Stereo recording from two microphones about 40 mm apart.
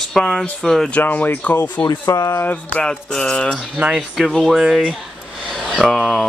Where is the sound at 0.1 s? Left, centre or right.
Centre.